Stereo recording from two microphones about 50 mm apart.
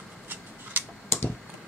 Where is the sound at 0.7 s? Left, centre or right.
Right.